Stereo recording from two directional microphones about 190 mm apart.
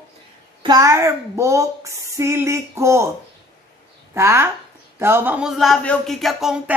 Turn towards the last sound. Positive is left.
turn(degrees=-5)  # may be behind; listen again after turning